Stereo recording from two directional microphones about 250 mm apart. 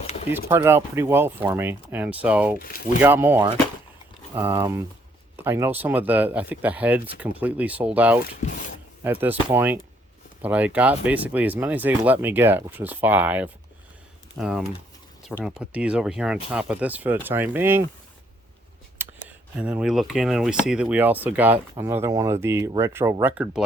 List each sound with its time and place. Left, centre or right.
0.5 s speech: centre
2.6 s speech: left
3.0 s speech: centre
8.4 s a sound: left
9.0 s speech: centre
19.5 s speech: centre